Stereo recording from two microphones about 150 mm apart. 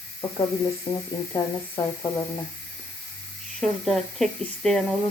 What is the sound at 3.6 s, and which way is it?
Speech, centre (ahead or behind).